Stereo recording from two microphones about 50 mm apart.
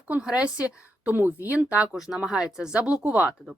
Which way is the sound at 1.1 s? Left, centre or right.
Right.